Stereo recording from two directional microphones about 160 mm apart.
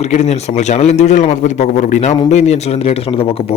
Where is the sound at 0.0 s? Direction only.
40° left (ahead or behind).